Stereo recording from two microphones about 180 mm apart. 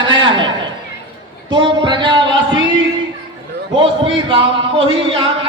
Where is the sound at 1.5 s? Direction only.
25° right (ahead or behind).